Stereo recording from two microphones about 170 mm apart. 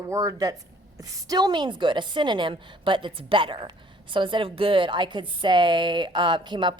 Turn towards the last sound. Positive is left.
turn(degrees=-25)  # may be behind; listen again after turning